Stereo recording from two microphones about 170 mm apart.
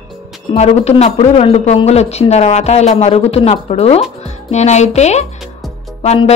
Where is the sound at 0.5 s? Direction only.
40° left (ahead or behind).